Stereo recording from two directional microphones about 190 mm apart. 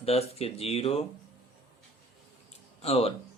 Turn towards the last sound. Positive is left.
turn(degrees=30)  # may be behind; listen again after turning